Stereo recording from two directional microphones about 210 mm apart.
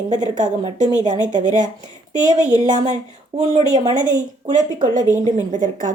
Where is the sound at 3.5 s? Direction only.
30° right (ahead or behind).